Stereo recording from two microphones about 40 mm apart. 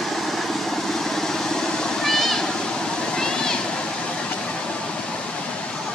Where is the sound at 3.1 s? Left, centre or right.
Centre.